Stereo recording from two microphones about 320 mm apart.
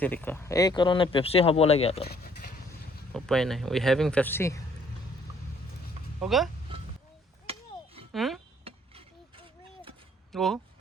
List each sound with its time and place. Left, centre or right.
0.0 s speech: centre
2.4 s vehicle: left
3.1 s speech: centre
6.1 s speech: centre
8.1 s speech: centre
8.6 s a sound: centre
10.3 s speech: centre